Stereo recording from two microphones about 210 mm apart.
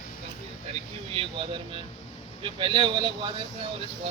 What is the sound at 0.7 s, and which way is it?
Speech, 25° right (ahead or behind).